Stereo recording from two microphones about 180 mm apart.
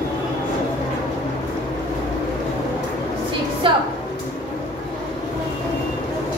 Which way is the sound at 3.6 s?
25° right (ahead or behind).